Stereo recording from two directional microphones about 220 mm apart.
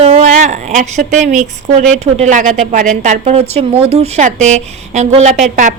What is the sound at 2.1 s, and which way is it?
A woman's voice, 35° right (ahead or behind).